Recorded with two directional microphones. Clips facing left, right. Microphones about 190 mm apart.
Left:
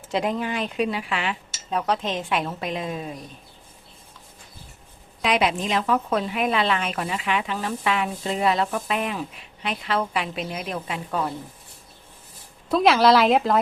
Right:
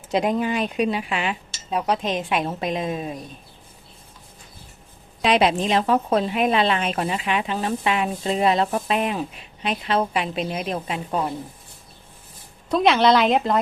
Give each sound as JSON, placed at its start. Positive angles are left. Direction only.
{"t": 0.1, "sound": "a woman's voice", "side_deg": -15}
{"t": 5.2, "sound": "a woman's voice", "side_deg": -30}
{"t": 12.6, "sound": "a woman's voice", "side_deg": 0}